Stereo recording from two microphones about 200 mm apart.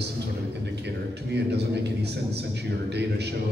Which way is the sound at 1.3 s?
55° right (ahead or behind).